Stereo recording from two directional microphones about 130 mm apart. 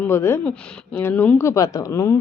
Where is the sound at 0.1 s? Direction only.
20° left (ahead or behind).